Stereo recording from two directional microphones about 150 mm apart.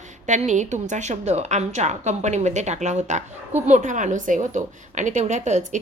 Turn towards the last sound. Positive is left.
turn(degrees=-50)  # may be behind; listen again after turning